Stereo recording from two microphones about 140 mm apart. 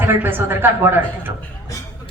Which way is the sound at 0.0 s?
15° right (ahead or behind).